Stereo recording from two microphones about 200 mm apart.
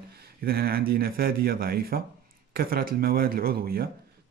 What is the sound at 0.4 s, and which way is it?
Speech, 50° right (ahead or behind).